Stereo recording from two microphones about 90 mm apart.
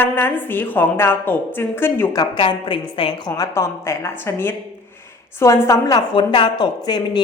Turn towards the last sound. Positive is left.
turn(degrees=50)  # may be behind; listen again after turning